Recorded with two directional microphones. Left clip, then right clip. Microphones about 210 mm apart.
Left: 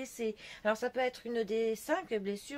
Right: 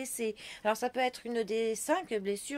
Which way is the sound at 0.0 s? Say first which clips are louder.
Right 2 dB; 45° right (ahead or behind).